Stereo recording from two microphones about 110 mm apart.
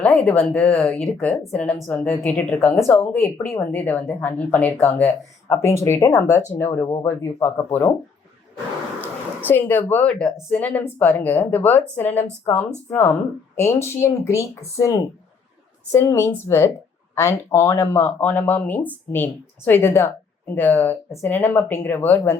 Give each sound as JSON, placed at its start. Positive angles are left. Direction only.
{"t": 0.0, "sound": "speech", "side_deg": 15}
{"t": 9.0, "sound": "speech", "side_deg": 15}